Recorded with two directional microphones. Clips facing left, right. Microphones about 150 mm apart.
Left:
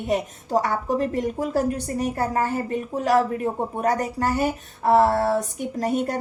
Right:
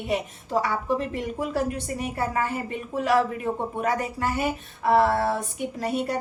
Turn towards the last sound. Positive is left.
turn(degrees=45)  # may be behind; listen again after turning